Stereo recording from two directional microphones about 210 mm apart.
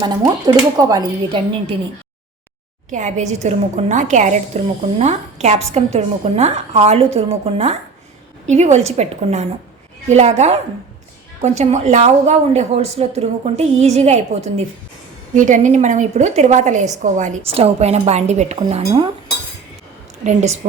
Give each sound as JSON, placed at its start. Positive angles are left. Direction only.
{"t": 0.0, "sound": "a woman's voice", "side_deg": -20}
{"t": 2.9, "sound": "a woman's voice", "side_deg": -35}
{"t": 20.2, "sound": "a woman's voice", "side_deg": -30}